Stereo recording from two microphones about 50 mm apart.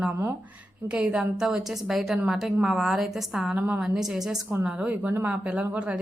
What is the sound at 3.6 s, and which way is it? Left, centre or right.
Speech, right.